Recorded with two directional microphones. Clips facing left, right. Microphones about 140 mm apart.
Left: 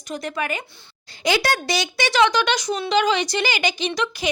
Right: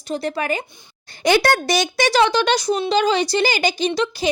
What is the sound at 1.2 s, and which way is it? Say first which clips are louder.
A woman's voice: right 5 dB; 55° right (ahead or behind).